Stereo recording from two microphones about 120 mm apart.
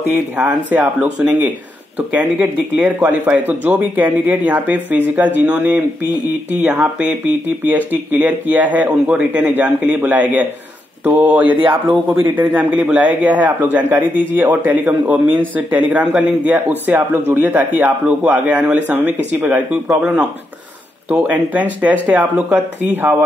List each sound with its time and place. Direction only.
0.1 s speech: 10° right (ahead or behind)
2.0 s speech: 10° right (ahead or behind)
11.4 s speech: 45° right (ahead or behind)
11.9 s speech: 15° right (ahead or behind)